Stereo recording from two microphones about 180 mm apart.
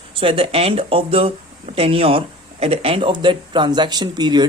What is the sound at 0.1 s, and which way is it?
Speech, 30° right (ahead or behind).